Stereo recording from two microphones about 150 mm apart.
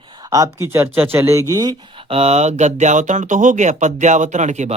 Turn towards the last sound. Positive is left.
turn(degrees=-50)  # may be behind; listen again after turning